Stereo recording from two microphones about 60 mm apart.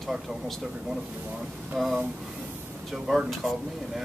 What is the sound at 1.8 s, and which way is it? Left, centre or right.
Speech, centre.